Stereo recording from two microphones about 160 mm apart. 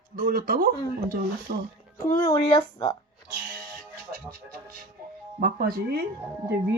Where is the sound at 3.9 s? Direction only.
60° right (ahead or behind).